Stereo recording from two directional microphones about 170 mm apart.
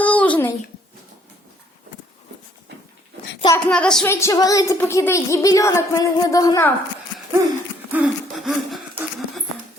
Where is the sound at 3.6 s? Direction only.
5° left (ahead or behind).